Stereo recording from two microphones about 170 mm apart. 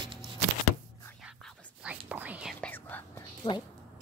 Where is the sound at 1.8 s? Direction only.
10° right (ahead or behind).